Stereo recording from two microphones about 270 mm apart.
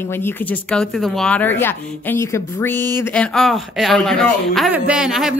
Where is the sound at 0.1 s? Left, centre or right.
Centre.